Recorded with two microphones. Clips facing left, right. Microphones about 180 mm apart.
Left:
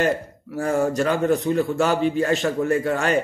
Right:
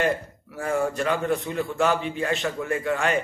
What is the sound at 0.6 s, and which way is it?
A man's voice, 40° left (ahead or behind).